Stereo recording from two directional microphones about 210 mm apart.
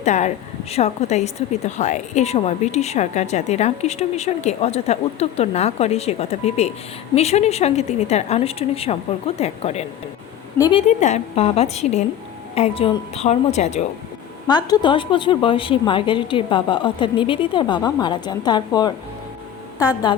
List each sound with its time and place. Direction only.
0.0 s a woman's voice: 35° left (ahead or behind)
10.8 s a woman's voice: 35° left (ahead or behind)
14.4 s a woman's voice: 20° left (ahead or behind)